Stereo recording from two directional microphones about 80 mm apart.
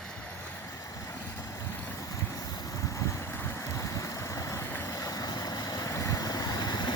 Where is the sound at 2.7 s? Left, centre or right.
Left.